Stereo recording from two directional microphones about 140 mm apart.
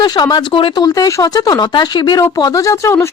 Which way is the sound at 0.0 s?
30° left (ahead or behind).